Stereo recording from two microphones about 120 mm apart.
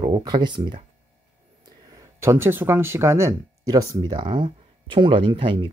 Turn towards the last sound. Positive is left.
turn(degrees=-45)  # may be behind; listen again after turning